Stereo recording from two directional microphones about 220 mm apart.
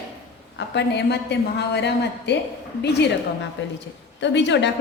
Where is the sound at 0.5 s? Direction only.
55° left (ahead or behind).